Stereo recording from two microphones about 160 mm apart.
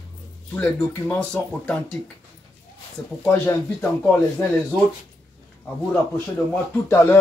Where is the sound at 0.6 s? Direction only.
10° left (ahead or behind).